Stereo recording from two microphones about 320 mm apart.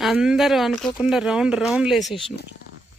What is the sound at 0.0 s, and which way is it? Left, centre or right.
Speech, centre.